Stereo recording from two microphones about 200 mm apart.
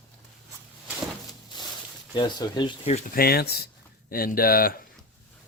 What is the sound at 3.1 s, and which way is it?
Speech, 50° left (ahead or behind).